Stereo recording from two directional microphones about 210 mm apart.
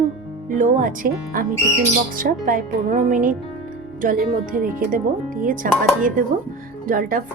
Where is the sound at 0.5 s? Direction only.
40° right (ahead or behind).